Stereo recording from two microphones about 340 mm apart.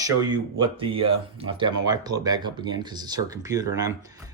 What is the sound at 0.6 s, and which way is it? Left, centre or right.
Speech, centre.